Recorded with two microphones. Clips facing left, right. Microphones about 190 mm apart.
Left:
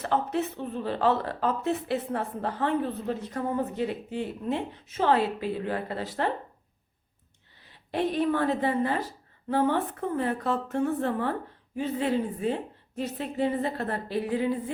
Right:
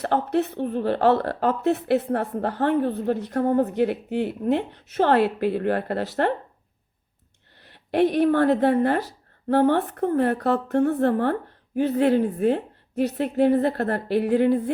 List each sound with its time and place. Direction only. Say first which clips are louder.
0.0 s speech: right 5 dB; 65° right (ahead or behind)
7.6 s speech: right 8 dB; 70° right (ahead or behind)